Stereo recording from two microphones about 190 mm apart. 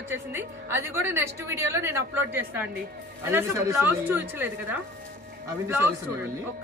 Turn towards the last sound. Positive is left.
turn(degrees=-10)  # may be behind; listen again after turning